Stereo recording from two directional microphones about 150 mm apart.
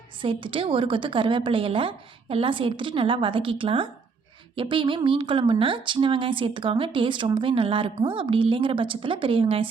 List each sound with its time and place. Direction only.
0.2 s speech: 35° right (ahead or behind)